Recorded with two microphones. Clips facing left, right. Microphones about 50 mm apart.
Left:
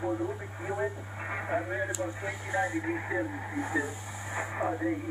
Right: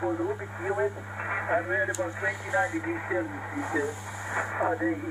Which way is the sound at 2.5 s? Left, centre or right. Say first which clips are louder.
Right 1 dB; centre.